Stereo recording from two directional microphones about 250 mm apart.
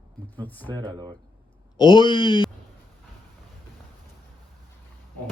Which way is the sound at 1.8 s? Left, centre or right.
Centre.